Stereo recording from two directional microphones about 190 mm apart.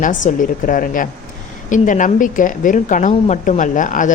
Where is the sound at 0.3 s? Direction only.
45° left (ahead or behind).